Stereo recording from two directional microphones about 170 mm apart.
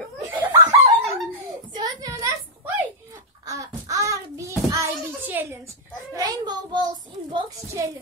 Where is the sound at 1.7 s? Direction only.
25° right (ahead or behind).